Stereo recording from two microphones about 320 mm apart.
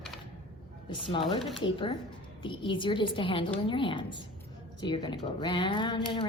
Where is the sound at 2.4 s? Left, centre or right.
Centre.